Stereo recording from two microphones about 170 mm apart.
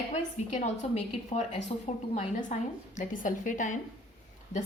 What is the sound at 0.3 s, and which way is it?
A woman's voice, 45° left (ahead or behind).